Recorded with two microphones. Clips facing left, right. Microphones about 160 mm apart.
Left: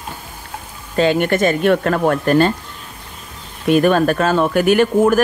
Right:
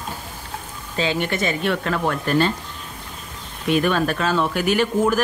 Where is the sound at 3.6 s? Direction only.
45° left (ahead or behind).